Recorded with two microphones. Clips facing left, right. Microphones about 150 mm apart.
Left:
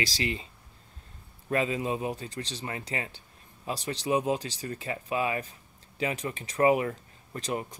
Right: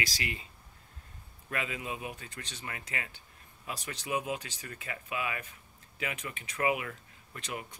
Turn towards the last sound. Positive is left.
turn(degrees=40)  # may be behind; listen again after turning